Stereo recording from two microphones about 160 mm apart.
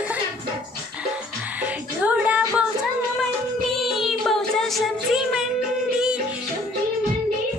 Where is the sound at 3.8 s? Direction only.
Centre (ahead or behind).